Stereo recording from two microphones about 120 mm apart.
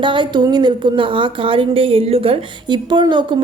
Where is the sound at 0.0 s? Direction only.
40° right (ahead or behind).